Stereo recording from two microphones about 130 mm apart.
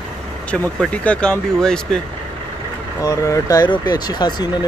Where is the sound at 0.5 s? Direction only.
10° left (ahead or behind).